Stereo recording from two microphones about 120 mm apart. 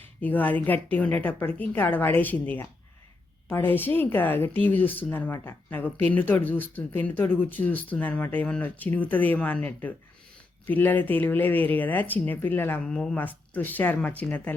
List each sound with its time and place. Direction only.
0.2 s speech: 15° left (ahead or behind)